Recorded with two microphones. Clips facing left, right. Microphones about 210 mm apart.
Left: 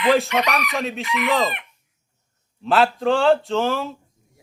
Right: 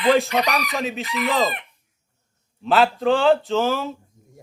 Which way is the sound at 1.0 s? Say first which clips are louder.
Left 1 dB; 35° right (ahead or behind).